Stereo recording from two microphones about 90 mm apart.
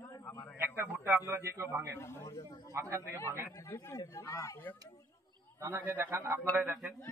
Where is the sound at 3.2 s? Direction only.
25° left (ahead or behind).